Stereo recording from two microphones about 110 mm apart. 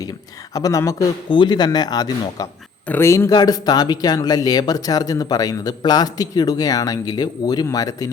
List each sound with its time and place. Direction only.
0.5 s speech: 30° left (ahead or behind)
1.3 s speech: 45° left (ahead or behind)
2.8 s speech: 20° left (ahead or behind)
3.3 s speech: 35° left (ahead or behind)